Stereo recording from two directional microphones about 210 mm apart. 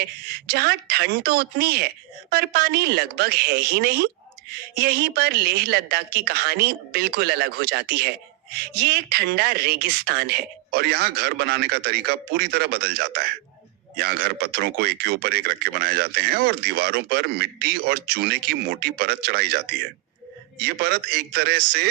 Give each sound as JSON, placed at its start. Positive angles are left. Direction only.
{"t": 0.5, "sound": "speech", "side_deg": -50}